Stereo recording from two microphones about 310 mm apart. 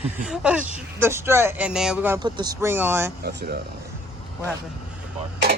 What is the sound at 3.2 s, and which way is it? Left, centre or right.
Speech, right.